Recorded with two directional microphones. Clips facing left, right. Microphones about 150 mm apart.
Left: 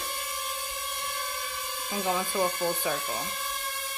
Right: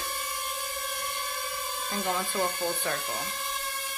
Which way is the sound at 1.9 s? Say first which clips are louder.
Left 2 dB; 5° left (ahead or behind).